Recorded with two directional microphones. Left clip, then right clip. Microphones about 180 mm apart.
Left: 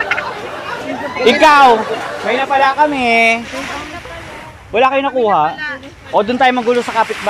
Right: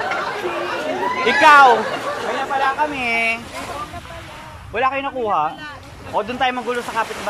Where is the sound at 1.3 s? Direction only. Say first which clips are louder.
Left 3 dB; 15° left (ahead or behind).